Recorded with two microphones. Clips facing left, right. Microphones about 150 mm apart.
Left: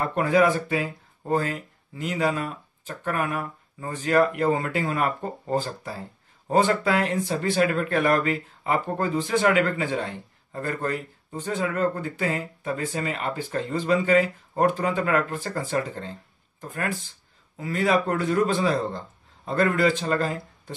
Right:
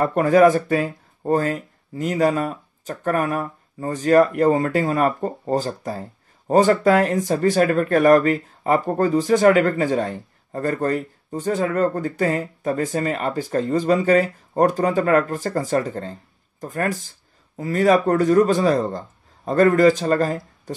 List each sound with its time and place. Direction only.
0.0 s speech: 45° right (ahead or behind)